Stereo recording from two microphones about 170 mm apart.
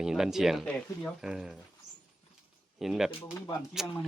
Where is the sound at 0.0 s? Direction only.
5° right (ahead or behind).